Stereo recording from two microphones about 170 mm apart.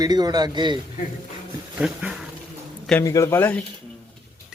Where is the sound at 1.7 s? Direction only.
5° right (ahead or behind).